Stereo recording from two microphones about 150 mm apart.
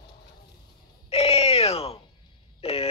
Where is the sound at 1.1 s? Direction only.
40° left (ahead or behind).